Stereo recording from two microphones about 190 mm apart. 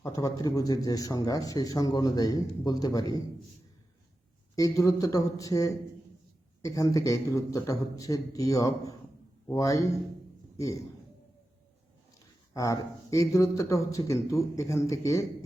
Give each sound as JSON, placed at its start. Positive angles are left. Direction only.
{"t": 0.0, "sound": "speech", "side_deg": 15}
{"t": 4.5, "sound": "speech", "side_deg": 20}
{"t": 12.5, "sound": "speech", "side_deg": 15}